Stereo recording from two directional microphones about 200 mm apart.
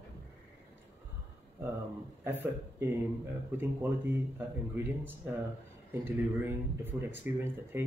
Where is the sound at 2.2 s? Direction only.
10° right (ahead or behind).